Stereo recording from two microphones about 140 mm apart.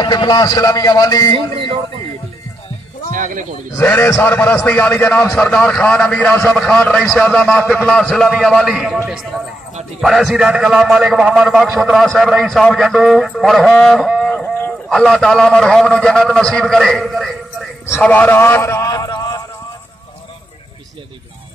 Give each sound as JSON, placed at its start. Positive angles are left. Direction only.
{"t": 0.0, "sound": "a man's voice", "side_deg": 30}
{"t": 3.1, "sound": "speech", "side_deg": -70}
{"t": 3.7, "sound": "a man's voice", "side_deg": 15}
{"t": 18.0, "sound": "a sound", "side_deg": 10}